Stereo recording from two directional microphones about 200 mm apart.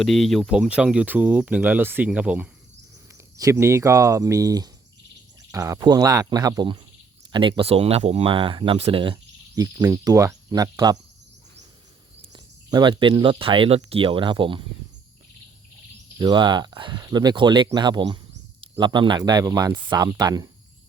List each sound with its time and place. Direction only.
0.0 s speech: centre (ahead or behind); by 10.9 s 20° right (ahead or behind)
12.3 s speech: 20° right (ahead or behind)
16.1 s speech: 20° right (ahead or behind)